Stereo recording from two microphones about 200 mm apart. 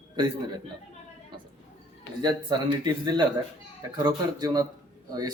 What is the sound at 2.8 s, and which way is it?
A man's voice, 20° right (ahead or behind).